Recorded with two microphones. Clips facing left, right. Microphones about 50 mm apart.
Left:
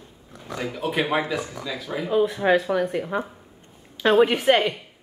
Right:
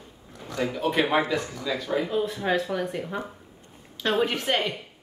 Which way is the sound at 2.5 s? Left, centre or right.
Centre.